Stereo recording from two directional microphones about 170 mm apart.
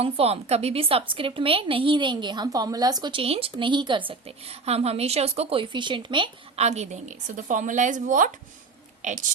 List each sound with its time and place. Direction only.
0.0 s a woman's voice: 35° right (ahead or behind)
6.7 s speech: 40° right (ahead or behind)